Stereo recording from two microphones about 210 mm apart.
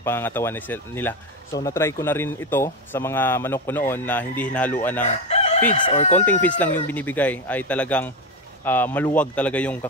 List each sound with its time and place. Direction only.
0.0 s speech: 10° left (ahead or behind)
5.0 s chicken: 30° left (ahead or behind)
6.4 s speech: 5° left (ahead or behind)